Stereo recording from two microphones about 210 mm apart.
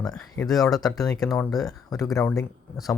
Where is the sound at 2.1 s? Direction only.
15° left (ahead or behind).